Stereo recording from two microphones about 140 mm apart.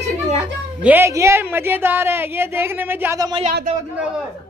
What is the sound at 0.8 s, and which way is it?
Speech, 15° right (ahead or behind).